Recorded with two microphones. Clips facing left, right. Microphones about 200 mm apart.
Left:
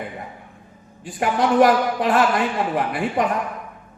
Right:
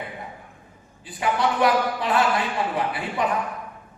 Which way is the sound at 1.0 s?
45° left (ahead or behind).